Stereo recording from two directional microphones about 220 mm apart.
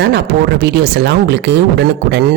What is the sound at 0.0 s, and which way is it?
Speech, 50° right (ahead or behind).